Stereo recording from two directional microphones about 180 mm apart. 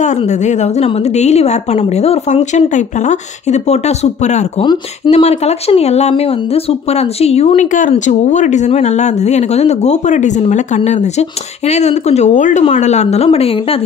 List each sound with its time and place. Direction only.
0.0 s speech: 40° left (ahead or behind)